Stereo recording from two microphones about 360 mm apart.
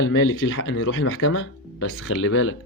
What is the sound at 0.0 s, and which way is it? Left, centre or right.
Speech, left.